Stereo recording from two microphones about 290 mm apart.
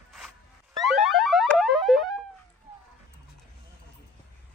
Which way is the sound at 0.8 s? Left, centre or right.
Centre.